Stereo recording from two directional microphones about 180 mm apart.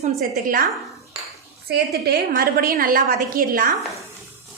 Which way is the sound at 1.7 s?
60° right (ahead or behind).